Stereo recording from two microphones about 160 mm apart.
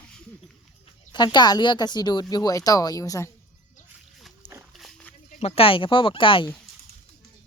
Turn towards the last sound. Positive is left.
turn(degrees=30)  # may be behind; listen again after turning